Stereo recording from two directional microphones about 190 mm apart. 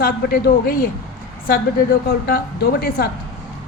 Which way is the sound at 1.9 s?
55° left (ahead or behind).